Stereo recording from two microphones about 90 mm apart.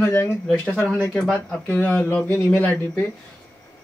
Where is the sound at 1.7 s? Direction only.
20° left (ahead or behind).